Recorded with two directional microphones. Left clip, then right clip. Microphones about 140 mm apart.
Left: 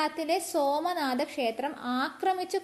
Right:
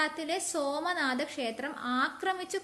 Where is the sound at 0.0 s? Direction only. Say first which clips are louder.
Left 3 dB; 25° left (ahead or behind).